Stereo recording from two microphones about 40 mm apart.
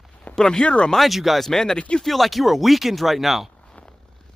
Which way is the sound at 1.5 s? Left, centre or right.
Centre.